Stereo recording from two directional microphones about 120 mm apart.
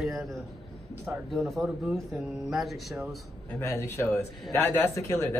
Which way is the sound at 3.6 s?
20° left (ahead or behind).